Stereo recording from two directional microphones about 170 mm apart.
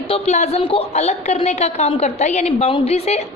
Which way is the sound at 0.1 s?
40° left (ahead or behind).